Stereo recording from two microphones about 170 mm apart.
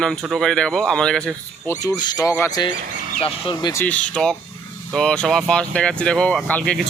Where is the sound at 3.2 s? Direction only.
35° left (ahead or behind).